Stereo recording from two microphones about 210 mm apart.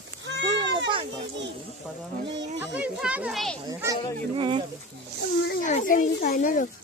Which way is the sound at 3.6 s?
15° right (ahead or behind).